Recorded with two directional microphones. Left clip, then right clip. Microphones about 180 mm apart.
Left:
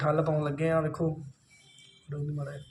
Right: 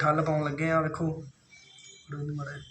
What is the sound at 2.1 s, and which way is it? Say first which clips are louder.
Speech: left 1 dB; 45° left (ahead or behind).